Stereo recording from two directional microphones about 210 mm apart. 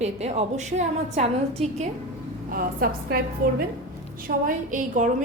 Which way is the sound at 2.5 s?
45° right (ahead or behind).